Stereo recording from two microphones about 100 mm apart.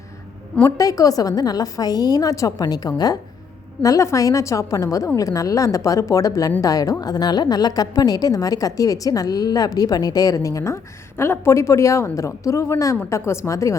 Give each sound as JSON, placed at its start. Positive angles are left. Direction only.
{"t": 0.6, "sound": "a woman's voice", "side_deg": 35}